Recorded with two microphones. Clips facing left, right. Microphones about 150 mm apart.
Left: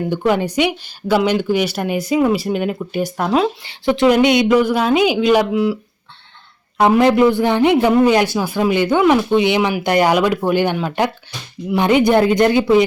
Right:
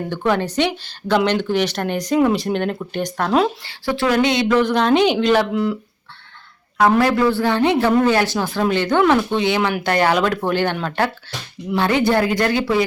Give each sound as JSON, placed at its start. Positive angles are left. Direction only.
{"t": 0.1, "sound": "speech", "side_deg": 15}
{"t": 3.6, "sound": "speech", "side_deg": 20}
{"t": 7.0, "sound": "speech", "side_deg": 15}